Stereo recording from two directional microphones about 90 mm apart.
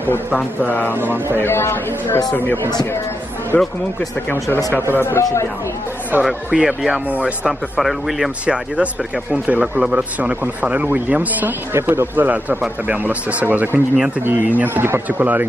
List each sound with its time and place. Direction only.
0.0 s a man's voice: 20° left (ahead or behind)
4.9 s a man's voice: 25° left (ahead or behind)
6.2 s speech: 5° right (ahead or behind)
7.8 s speech: 5° right (ahead or behind); by 15.4 s 20° right (ahead or behind)